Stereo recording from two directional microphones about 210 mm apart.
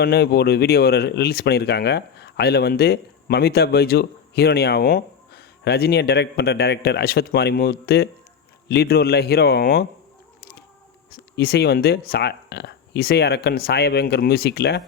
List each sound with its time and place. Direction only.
0.0 s speech: 50° left (ahead or behind)
11.1 s speech: 45° left (ahead or behind)